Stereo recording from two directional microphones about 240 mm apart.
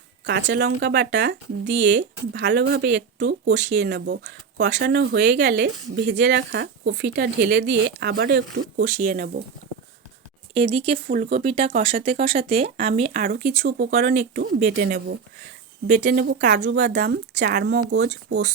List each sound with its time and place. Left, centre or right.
0.3 s speech: right
10.5 s speech: right
11.1 s speech: right
13.4 s speech: right
13.7 s speech: right